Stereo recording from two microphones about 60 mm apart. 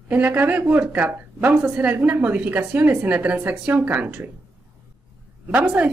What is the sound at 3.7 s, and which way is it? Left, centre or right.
Speech, right.